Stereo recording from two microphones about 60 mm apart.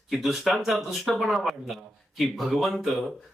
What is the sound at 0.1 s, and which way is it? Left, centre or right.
Speech, centre.